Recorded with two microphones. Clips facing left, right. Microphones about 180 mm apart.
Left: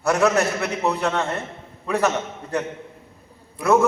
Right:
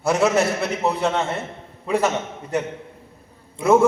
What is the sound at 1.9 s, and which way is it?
A man's voice, 20° right (ahead or behind).